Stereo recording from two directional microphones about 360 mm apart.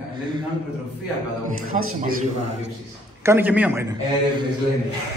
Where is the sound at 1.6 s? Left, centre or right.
Right.